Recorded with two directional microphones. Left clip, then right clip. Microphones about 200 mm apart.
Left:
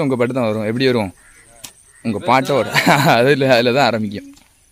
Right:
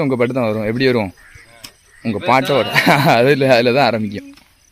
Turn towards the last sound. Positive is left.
turn(degrees=0)  # may be behind; listen again after turning